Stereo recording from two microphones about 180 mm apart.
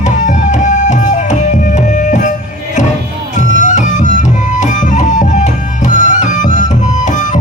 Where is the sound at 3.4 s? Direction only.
45° left (ahead or behind).